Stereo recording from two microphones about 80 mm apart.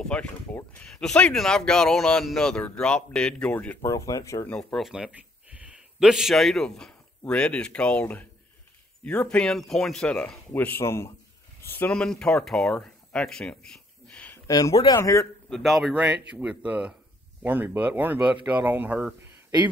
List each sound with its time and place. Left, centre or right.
0.0 s speech: centre
3.8 s speech: left
4.7 s speech: centre
5.1 s a man's voice: centre
9.5 s speech: centre
10.5 s speech: left
11.6 s a sound: left
11.9 s speech: centre
14.5 s speech: left
15.5 s speech: centre
15.9 s speech: centre